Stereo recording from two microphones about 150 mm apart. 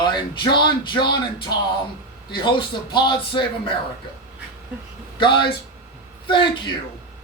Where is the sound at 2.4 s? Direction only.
30° left (ahead or behind).